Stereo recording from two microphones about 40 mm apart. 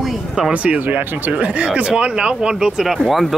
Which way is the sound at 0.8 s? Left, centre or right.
Right.